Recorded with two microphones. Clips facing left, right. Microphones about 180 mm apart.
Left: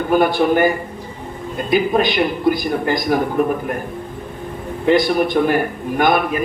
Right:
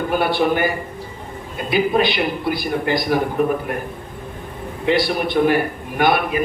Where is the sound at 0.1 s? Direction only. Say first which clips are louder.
Left 5 dB; 45° left (ahead or behind).